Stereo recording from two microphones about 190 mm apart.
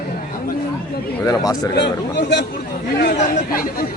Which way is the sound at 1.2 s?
20° left (ahead or behind).